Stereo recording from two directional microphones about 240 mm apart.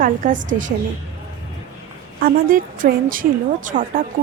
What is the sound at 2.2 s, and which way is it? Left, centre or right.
A woman's voice, right.